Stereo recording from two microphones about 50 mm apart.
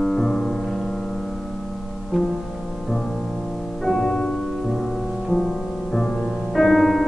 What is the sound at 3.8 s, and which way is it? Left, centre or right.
Music, centre.